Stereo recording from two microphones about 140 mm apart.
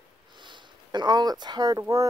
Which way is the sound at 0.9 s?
30° right (ahead or behind).